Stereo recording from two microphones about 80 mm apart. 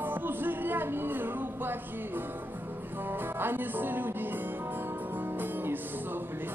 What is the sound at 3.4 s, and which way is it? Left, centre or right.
Music, right.